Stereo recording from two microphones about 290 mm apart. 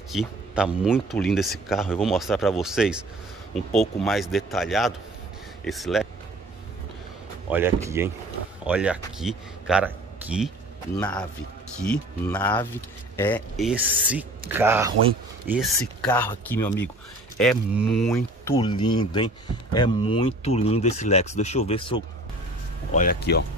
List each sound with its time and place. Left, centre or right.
0.1 s a man's voice: centre
7.5 s speech: centre
18.5 s speech: centre
22.9 s speech: left